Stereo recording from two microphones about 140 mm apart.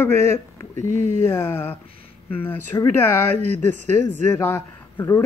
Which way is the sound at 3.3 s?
50° right (ahead or behind).